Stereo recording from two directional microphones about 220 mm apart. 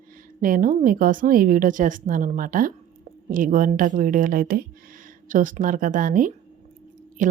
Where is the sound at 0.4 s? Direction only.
40° right (ahead or behind).